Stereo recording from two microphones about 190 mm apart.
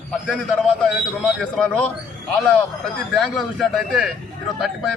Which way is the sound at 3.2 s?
Centre (ahead or behind).